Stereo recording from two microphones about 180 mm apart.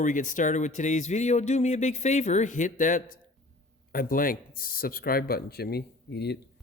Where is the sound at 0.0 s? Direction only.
45° left (ahead or behind); by 6.4 s 65° left (ahead or behind).